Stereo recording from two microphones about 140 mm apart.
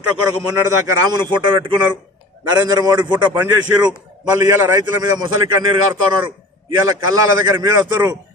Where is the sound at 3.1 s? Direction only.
10° right (ahead or behind).